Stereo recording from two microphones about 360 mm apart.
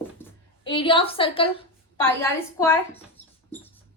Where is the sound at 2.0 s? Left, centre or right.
Centre.